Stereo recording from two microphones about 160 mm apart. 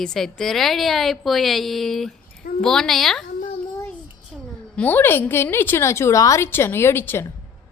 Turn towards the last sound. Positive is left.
turn(degrees=15)  # may be behind; listen again after turning